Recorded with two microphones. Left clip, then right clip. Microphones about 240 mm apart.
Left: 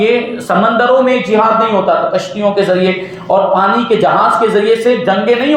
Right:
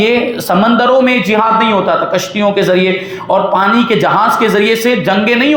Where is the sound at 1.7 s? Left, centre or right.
Right.